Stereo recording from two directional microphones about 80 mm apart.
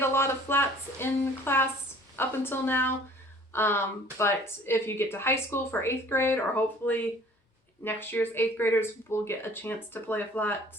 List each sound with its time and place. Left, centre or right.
0.0 s speech: left